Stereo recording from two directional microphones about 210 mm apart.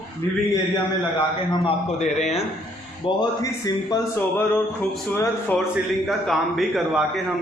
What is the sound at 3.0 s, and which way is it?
A man's voice, 15° left (ahead or behind).